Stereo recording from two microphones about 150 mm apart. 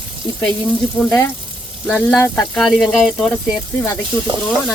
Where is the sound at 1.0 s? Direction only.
10° left (ahead or behind).